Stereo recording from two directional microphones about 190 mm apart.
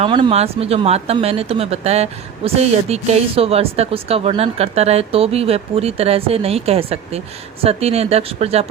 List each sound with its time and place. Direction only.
0.0 s speech: 30° right (ahead or behind)